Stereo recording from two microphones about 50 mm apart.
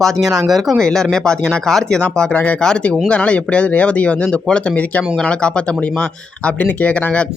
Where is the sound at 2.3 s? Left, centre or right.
Left.